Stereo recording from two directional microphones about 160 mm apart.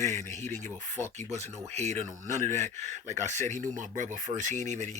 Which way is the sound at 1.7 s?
45° right (ahead or behind).